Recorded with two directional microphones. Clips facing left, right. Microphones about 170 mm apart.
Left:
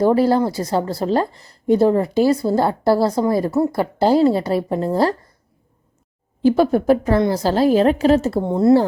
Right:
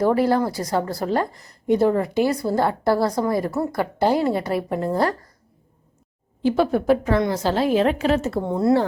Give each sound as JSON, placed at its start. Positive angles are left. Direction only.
{"t": 0.0, "sound": "a woman's voice", "side_deg": 30}
{"t": 6.4, "sound": "a woman's voice", "side_deg": 40}